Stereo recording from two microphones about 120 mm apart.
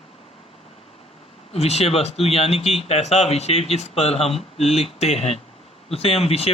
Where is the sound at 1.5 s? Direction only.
55° left (ahead or behind).